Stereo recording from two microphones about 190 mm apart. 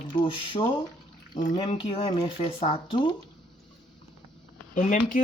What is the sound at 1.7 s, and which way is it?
Speech, 30° left (ahead or behind).